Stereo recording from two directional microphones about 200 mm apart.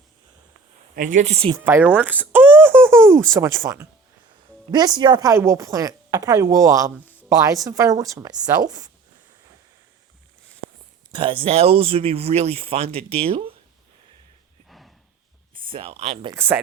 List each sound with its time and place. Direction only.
0.9 s speech: 40° right (ahead or behind)
1.5 s speech: 10° right (ahead or behind)
7.0 s a sound: 10° left (ahead or behind)
7.3 s speech: 15° right (ahead or behind)
11.1 s speech: 25° right (ahead or behind)
14.7 s a sound: centre (ahead or behind)
15.5 s speech: 25° right (ahead or behind)
16.3 s speech: 10° right (ahead or behind)